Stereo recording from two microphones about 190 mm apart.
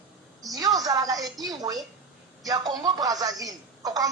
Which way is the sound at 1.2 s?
Centre (ahead or behind).